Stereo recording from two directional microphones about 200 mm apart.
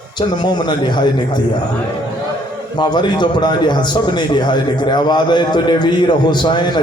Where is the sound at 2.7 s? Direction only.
20° left (ahead or behind).